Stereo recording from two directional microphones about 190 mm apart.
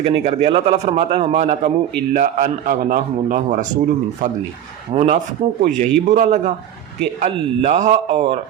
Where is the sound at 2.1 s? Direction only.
45° right (ahead or behind).